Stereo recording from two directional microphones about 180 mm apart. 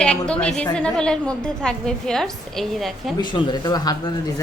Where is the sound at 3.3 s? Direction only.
25° left (ahead or behind).